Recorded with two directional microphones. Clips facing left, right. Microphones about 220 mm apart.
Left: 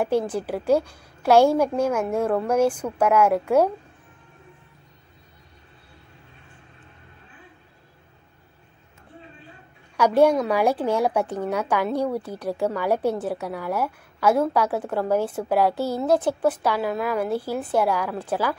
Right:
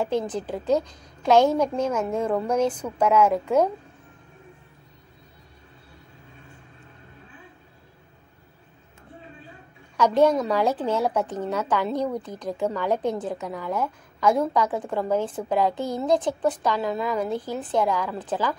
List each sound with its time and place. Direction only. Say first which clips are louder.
0.0 s a woman's voice: left 3 dB; 10° left (ahead or behind)
9.9 s a woman's voice: left 2 dB; 10° left (ahead or behind)